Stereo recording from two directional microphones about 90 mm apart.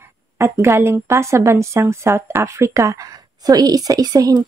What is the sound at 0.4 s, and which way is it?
A woman's voice, 30° right (ahead or behind).